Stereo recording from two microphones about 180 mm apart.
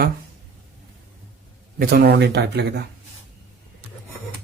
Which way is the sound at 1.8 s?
55° right (ahead or behind).